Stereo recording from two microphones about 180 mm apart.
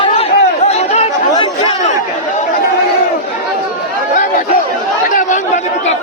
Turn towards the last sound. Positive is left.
turn(degrees=45)  # may be behind; listen again after turning